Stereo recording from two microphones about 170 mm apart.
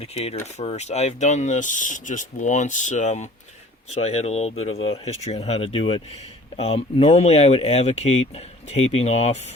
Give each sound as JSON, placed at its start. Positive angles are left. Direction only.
{"t": 0.0, "sound": "speech", "side_deg": 40}